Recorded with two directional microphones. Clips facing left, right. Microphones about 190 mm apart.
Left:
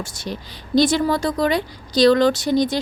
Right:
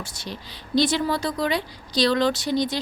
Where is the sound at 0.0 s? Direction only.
45° left (ahead or behind).